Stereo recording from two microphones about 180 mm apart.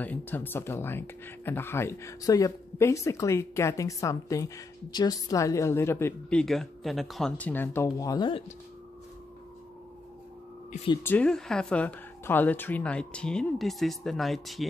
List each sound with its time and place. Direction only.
0.0 s speech: 10° left (ahead or behind)
6.4 s speech: centre (ahead or behind); by 8.5 s 25° left (ahead or behind)
11.0 s speech: 10° left (ahead or behind)